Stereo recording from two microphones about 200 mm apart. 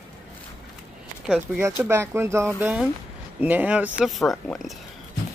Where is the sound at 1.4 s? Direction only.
10° right (ahead or behind).